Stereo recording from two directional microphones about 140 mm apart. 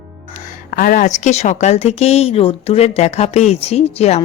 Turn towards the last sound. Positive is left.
turn(degrees=50)  # may be behind; listen again after turning